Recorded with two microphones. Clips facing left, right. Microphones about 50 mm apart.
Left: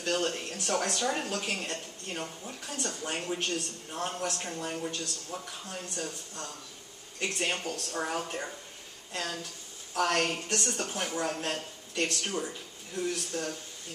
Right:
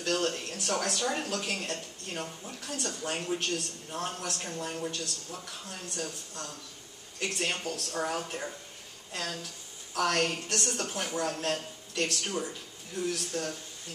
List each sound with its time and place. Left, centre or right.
0.0 s a man's voice: centre
5.9 s a man's voice: centre
10.6 s speech: centre
12.1 s speech: centre